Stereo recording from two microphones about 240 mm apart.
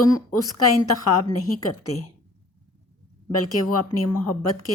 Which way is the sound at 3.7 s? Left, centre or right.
Left.